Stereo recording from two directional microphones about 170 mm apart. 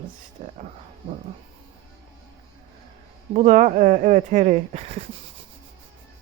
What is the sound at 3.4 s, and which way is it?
Speech, 45° right (ahead or behind).